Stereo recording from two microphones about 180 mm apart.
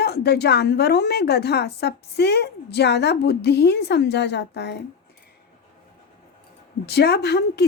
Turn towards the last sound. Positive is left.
turn(degrees=65)  # may be behind; listen again after turning